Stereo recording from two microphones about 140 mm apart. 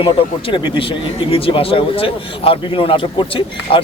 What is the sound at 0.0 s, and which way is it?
A man's voice, 35° left (ahead or behind).